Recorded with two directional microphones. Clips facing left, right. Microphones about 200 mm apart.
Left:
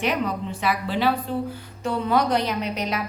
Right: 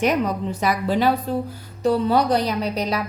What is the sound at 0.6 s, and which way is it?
A woman's voice, 45° right (ahead or behind).